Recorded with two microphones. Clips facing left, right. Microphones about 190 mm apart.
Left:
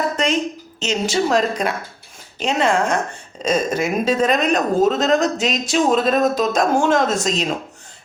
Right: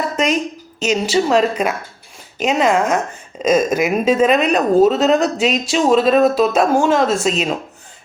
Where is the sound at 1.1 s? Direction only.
5° right (ahead or behind).